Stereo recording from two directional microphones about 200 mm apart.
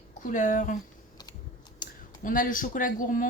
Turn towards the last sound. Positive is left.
turn(degrees=40)  # may be behind; listen again after turning